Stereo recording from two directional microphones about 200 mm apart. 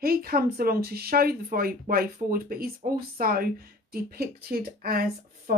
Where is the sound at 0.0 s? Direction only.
50° right (ahead or behind).